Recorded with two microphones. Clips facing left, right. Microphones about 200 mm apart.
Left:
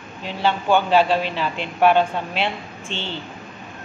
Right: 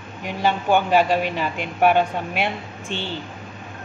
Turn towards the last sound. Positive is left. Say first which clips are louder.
# right 1 dB
turn(degrees=-10)  # may be behind; listen again after turning